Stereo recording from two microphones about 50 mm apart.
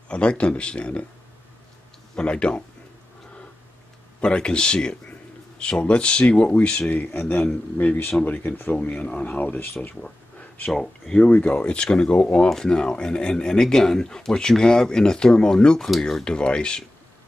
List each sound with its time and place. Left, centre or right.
0.1 s speech: left
2.1 s speech: left
4.2 s speech: centre
7.7 s speech: left
8.8 s speech: left
10.7 s speech: centre
11.2 s speech: left; by 16.3 s centre
16.3 s speech: centre